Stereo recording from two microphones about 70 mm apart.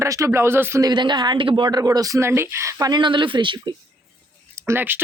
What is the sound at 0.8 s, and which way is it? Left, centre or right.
A woman's voice, right.